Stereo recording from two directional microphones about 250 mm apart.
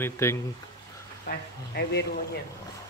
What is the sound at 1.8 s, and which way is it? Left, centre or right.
Speech, left.